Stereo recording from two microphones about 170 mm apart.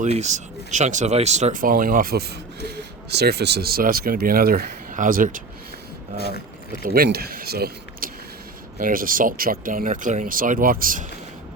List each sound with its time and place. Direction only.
0.0 s speech: 45° right (ahead or behind)
6.1 s speech: 70° left (ahead or behind)
6.8 s speech: 60° right (ahead or behind)